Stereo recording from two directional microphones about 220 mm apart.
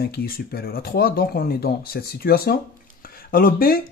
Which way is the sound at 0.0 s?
45° left (ahead or behind).